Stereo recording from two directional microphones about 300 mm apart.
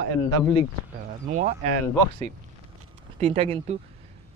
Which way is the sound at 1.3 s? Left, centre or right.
Right.